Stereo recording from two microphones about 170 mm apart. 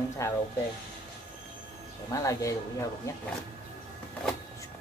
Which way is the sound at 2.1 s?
20° left (ahead or behind).